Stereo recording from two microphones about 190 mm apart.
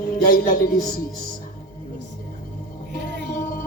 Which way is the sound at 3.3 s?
50° left (ahead or behind).